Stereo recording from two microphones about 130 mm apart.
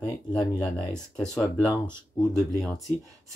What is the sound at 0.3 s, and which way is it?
Speech, 10° left (ahead or behind).